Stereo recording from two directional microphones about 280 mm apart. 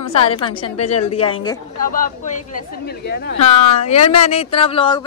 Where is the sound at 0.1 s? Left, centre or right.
Centre.